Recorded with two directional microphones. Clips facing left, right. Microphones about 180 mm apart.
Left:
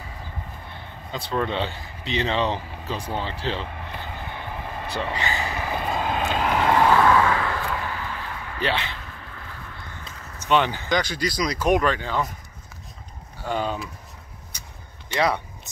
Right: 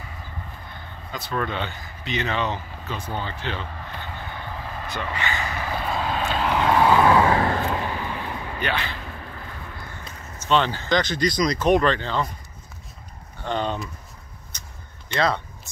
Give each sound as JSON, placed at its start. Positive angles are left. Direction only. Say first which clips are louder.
{"t": 1.1, "sound": "speech", "louder": "left 2 dB", "side_deg": 25}
{"t": 4.5, "sound": "vehicle", "louder": "left 1 dB", "side_deg": 15}
{"t": 4.8, "sound": "speech", "louder": "left 2 dB", "side_deg": 35}
{"t": 5.4, "sound": "vehicle", "louder": "left 1 dB", "side_deg": 20}
{"t": 6.9, "sound": "vehicle", "louder": "right 1 dB", "side_deg": -20}
{"t": 7.3, "sound": "vehicle", "louder": "right 4 dB", "side_deg": -40}
{"t": 7.6, "sound": "a sound", "louder": "right 3 dB", "side_deg": -20}
{"t": 8.5, "sound": "speech", "louder": "left 2 dB", "side_deg": 25}
{"t": 10.4, "sound": "speech", "louder": "even", "side_deg": 15}
{"t": 13.4, "sound": "speech", "louder": "even", "side_deg": 5}
{"t": 14.5, "sound": "vehicle", "louder": "even", "side_deg": 10}
{"t": 15.1, "sound": "speech", "louder": "even", "side_deg": 10}